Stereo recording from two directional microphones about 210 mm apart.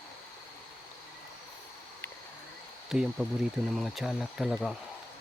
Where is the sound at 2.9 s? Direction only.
5° right (ahead or behind).